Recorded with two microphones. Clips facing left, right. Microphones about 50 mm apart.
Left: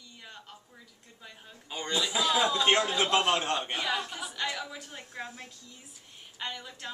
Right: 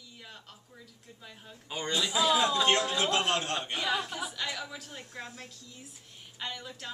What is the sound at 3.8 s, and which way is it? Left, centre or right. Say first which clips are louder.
A man's voice: right 1 dB; centre.